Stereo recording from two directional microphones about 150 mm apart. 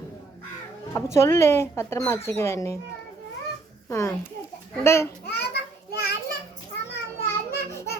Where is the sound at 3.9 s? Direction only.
20° left (ahead or behind).